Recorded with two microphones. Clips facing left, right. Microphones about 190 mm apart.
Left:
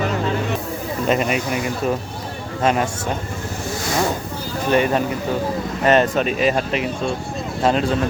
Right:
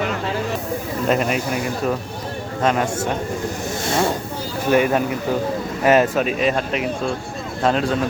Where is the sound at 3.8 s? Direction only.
25° right (ahead or behind).